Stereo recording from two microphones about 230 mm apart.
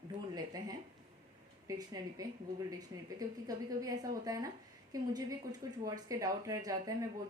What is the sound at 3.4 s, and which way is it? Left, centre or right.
A woman's voice, centre.